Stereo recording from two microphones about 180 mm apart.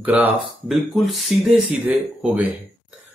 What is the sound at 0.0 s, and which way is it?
Speech, 10° right (ahead or behind).